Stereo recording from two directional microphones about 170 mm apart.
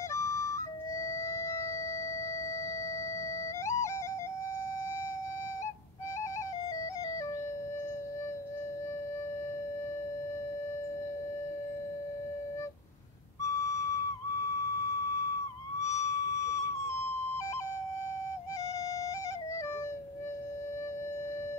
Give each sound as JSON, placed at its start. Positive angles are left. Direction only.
{"t": 0.1, "sound": "flute", "side_deg": 15}
{"t": 1.0, "sound": "music", "side_deg": 15}
{"t": 3.6, "sound": "music", "side_deg": 15}
{"t": 13.4, "sound": "music", "side_deg": 15}
{"t": 15.8, "sound": "a sound", "side_deg": 20}